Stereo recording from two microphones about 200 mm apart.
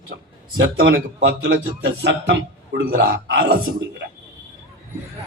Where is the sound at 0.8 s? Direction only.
55° right (ahead or behind).